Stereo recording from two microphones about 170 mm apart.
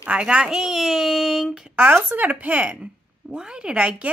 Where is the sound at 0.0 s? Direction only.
5° right (ahead or behind).